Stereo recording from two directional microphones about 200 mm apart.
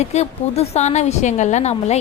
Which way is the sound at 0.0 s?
35° left (ahead or behind).